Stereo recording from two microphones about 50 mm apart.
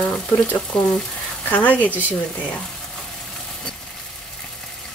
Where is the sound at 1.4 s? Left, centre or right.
Left.